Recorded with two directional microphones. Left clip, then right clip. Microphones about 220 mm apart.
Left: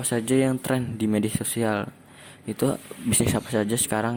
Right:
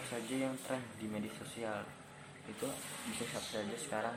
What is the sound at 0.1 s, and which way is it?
Speech, 50° left (ahead or behind).